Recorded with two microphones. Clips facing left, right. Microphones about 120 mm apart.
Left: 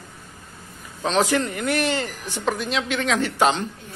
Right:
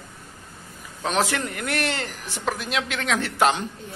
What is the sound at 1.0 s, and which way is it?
Speech, centre (ahead or behind).